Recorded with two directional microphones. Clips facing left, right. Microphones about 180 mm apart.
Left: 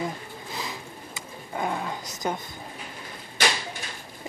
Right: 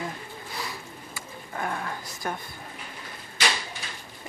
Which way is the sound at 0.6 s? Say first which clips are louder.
Left 1 dB; 20° left (ahead or behind).